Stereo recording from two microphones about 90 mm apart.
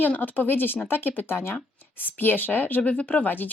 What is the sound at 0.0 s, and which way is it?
Speech, 20° left (ahead or behind).